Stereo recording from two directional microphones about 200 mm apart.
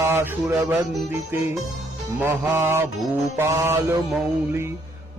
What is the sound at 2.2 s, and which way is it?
Music, 10° right (ahead or behind).